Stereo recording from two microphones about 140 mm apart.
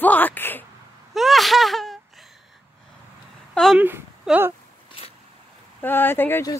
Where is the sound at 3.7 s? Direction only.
10° right (ahead or behind).